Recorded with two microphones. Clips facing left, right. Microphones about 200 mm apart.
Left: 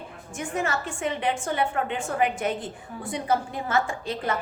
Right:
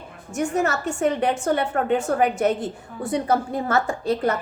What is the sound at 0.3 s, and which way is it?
A woman's voice, 40° right (ahead or behind).